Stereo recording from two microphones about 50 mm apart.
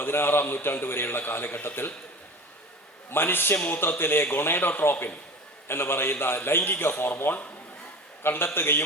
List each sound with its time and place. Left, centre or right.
0.0 s a man's voice: left
3.1 s a man's voice: left